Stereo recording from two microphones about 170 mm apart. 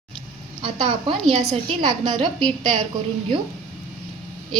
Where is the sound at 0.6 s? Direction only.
30° right (ahead or behind).